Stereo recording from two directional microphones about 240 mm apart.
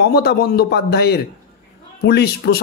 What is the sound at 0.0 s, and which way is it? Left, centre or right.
Speech, left.